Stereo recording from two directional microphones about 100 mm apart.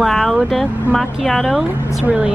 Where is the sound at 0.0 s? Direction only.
5° left (ahead or behind).